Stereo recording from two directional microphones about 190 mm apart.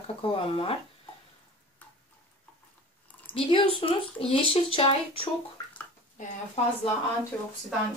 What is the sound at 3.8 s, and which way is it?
Speech, 30° left (ahead or behind).